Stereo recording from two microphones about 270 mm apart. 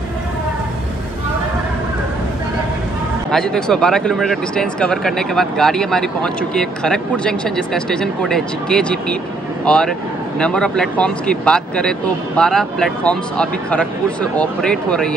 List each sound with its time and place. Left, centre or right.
3.3 s speech: centre